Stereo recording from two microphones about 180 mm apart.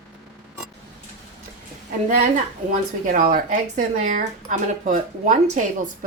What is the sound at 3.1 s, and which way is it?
Speech, 50° right (ahead or behind).